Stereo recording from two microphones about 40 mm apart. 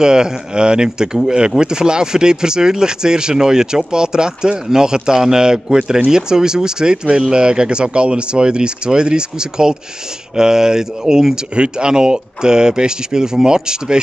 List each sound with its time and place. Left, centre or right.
0.0 s speech: centre